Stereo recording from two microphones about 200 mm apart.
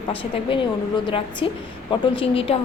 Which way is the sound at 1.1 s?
25° left (ahead or behind).